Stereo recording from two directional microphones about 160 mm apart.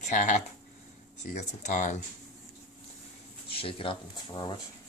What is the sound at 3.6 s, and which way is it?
Speech, 35° left (ahead or behind).